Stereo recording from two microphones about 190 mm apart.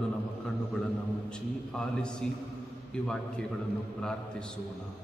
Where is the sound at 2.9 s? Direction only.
5° left (ahead or behind).